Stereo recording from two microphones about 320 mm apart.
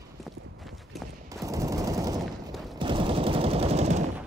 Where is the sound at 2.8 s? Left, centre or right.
Centre.